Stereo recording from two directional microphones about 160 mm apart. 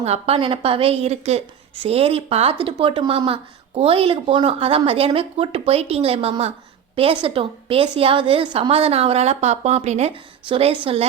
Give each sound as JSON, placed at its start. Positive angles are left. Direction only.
{"t": 0.0, "sound": "speech", "side_deg": -40}